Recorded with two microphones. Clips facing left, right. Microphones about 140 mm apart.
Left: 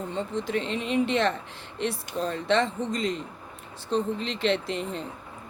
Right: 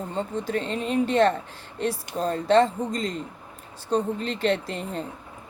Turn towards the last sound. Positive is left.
turn(degrees=-40)  # may be behind; listen again after turning